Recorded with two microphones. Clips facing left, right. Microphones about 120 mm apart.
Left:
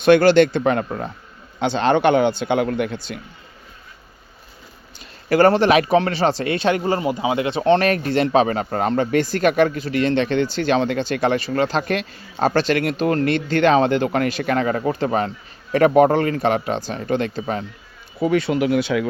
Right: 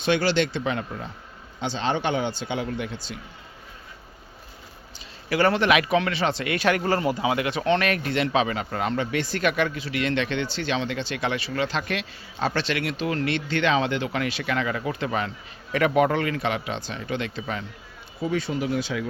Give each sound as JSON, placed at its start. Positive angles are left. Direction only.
{"t": 0.0, "sound": "speech", "side_deg": 55}
{"t": 4.9, "sound": "a man's voice", "side_deg": 45}
{"t": 18.2, "sound": "speech", "side_deg": 65}